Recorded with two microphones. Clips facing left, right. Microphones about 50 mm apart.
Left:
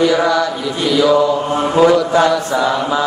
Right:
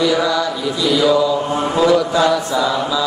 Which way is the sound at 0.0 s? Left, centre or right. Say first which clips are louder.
Left 3 dB; left.